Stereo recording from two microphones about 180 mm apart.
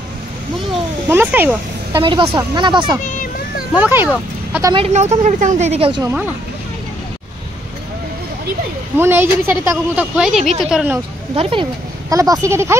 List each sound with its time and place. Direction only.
1.0 s speech: 10° right (ahead or behind)
2.0 s speech: 25° right (ahead or behind)
3.1 s a sound: 50° left (ahead or behind)
3.7 s speech: 10° right (ahead or behind)
4.7 s a woman's voice: 35° right (ahead or behind)
8.9 s speech: 10° right (ahead or behind)
12.1 s speech: 20° right (ahead or behind)